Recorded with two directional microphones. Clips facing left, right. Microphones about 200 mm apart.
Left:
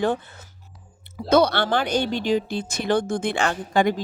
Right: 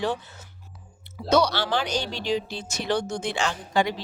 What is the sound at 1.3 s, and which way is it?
A woman's voice, 55° left (ahead or behind).